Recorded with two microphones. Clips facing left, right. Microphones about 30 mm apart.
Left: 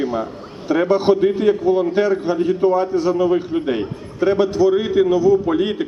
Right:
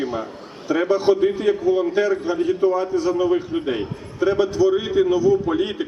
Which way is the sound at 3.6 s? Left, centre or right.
Left.